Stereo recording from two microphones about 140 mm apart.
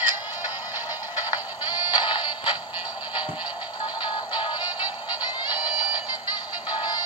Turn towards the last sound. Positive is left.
turn(degrees=-10)  # may be behind; listen again after turning